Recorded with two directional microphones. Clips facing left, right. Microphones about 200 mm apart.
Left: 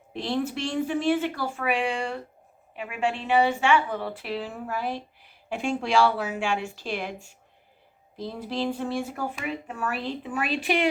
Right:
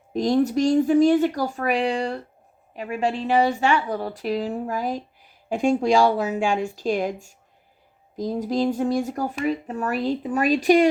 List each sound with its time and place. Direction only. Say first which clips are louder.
0.1 s a woman's voice: right 8 dB; 40° right (ahead or behind)